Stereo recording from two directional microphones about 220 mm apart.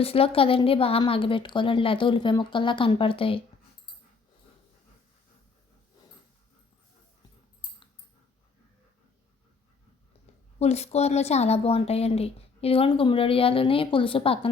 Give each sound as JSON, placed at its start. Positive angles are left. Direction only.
{"t": 0.0, "sound": "speech", "side_deg": 25}
{"t": 10.6, "sound": "speech", "side_deg": 30}